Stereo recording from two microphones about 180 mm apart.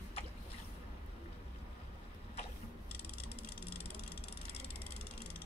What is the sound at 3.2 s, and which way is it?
Vehicle, 60° left (ahead or behind).